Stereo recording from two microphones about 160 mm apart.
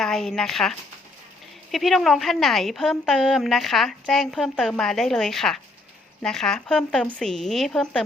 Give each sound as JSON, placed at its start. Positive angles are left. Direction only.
{"t": 0.0, "sound": "a woman's voice", "side_deg": 5}